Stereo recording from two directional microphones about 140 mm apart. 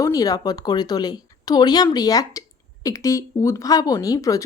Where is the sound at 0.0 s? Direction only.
25° left (ahead or behind).